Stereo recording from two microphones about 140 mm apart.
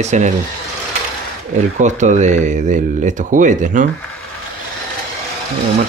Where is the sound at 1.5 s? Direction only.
60° right (ahead or behind).